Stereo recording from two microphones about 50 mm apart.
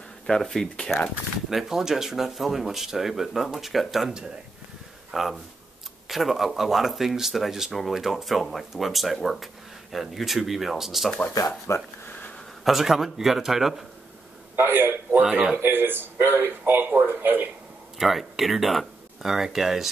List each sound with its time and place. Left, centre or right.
0.3 s speech: centre
1.5 s speech: centre
5.1 s speech: centre
11.3 s speech: left
12.6 s speech: centre
14.5 s a man's voice: right
17.9 s speech: centre